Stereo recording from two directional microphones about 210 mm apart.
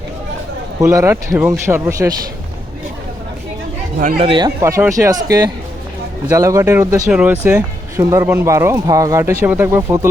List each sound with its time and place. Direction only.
0.8 s speech: 15° right (ahead or behind)
4.0 s speech: 40° right (ahead or behind)
4.3 s speech: 20° right (ahead or behind)